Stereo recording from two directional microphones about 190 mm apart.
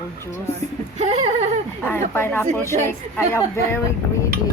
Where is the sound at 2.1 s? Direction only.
10° left (ahead or behind).